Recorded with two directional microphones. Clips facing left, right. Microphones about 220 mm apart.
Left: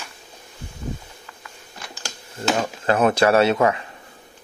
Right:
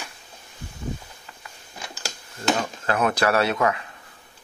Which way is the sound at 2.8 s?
30° left (ahead or behind).